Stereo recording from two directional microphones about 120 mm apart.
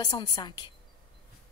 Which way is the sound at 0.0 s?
35° left (ahead or behind).